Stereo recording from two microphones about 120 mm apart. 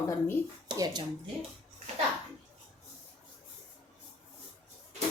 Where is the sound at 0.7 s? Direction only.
35° right (ahead or behind).